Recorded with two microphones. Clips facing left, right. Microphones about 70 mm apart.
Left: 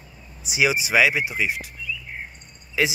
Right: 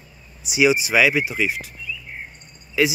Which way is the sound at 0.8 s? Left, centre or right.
Left.